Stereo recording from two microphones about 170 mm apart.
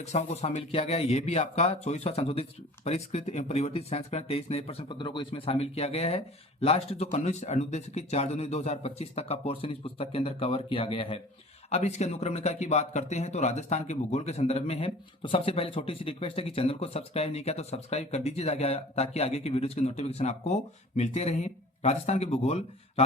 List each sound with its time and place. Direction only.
0.0 s speech: 40° left (ahead or behind)